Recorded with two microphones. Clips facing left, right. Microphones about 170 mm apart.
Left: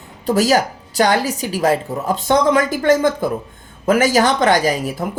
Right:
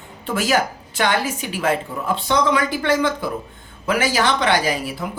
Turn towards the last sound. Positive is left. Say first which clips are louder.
# left 4 dB
turn(degrees=45)  # may be behind; listen again after turning